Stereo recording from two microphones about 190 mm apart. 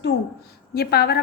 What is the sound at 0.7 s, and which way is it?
Speech, 55° left (ahead or behind).